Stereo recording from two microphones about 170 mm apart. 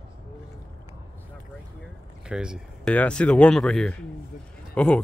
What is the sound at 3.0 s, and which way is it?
Speech, 5° left (ahead or behind).